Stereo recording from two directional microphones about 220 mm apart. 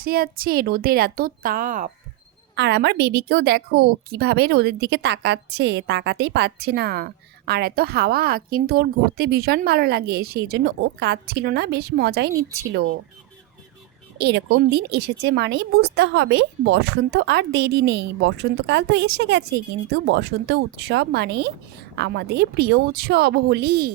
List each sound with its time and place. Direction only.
0.0 s a woman's voice: 45° right (ahead or behind)
2.6 s a woman's voice: 50° right (ahead or behind)
14.2 s a woman's voice: 50° right (ahead or behind)